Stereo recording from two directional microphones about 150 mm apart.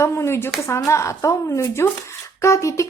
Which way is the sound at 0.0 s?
20° left (ahead or behind).